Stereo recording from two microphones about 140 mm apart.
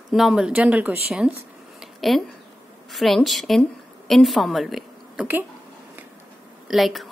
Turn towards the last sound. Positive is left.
turn(degrees=0)  # may be behind; listen again after turning